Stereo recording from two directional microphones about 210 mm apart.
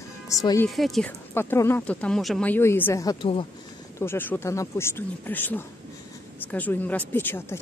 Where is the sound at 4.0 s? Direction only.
10° left (ahead or behind).